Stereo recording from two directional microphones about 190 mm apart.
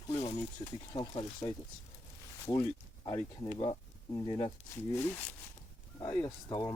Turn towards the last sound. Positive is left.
turn(degrees=15)  # may be behind; listen again after turning